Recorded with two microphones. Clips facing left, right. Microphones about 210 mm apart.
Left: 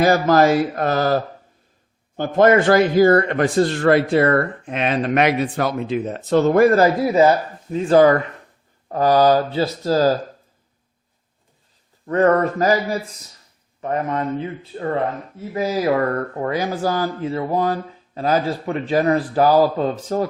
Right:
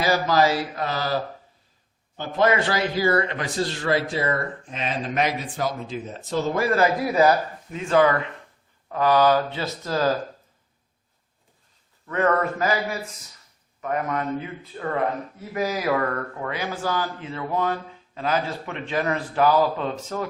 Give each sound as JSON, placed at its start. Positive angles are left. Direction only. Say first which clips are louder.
{"t": 0.0, "sound": "speech", "louder": "left 6 dB", "side_deg": 50}
{"t": 7.1, "sound": "speech", "louder": "left 4 dB", "side_deg": 25}
{"t": 12.0, "sound": "a man's voice", "louder": "left 6 dB", "side_deg": 40}